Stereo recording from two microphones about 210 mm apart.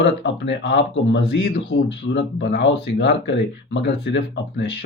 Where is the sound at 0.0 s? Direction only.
55° left (ahead or behind).